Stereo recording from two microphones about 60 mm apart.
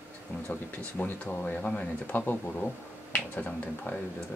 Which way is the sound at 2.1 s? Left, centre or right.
Left.